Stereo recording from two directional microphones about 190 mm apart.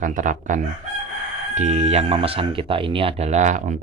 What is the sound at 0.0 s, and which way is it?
Speech, 45° right (ahead or behind).